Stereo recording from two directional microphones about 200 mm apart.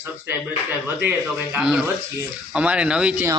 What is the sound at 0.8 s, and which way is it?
A man's voice, 10° right (ahead or behind).